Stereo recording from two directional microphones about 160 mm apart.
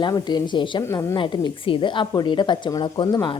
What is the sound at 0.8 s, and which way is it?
Speech, 15° left (ahead or behind).